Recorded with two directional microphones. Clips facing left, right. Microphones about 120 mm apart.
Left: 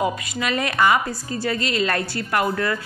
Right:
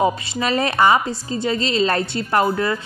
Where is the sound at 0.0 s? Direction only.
30° right (ahead or behind).